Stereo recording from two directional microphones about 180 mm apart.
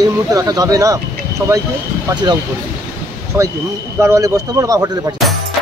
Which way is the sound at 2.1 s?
25° right (ahead or behind).